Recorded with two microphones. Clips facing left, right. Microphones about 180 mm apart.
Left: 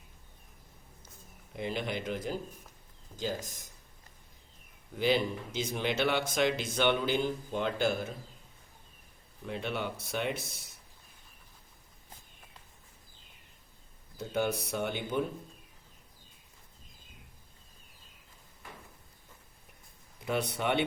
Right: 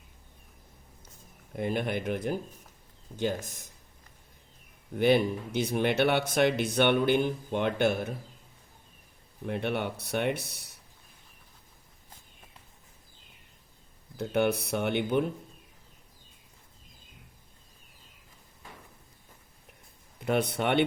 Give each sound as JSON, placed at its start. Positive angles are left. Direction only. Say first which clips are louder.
{"t": 1.5, "sound": "speech", "louder": "right 5 dB", "side_deg": -50}
{"t": 4.9, "sound": "speech", "louder": "right 5 dB", "side_deg": -55}
{"t": 9.5, "sound": "speech", "louder": "right 4 dB", "side_deg": -60}
{"t": 14.2, "sound": "speech", "louder": "right 5 dB", "side_deg": -65}
{"t": 20.1, "sound": "speech", "louder": "right 5 dB", "side_deg": -65}